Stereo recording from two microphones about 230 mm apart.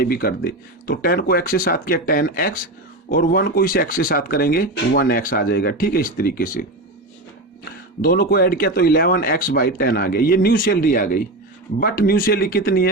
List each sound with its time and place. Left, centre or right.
0.0 s speech: left
8.0 s speech: left